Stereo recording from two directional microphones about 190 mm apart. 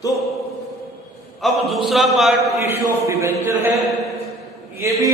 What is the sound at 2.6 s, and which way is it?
Speech, 15° right (ahead or behind).